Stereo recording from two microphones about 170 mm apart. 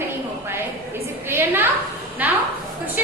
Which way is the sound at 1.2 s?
15° right (ahead or behind).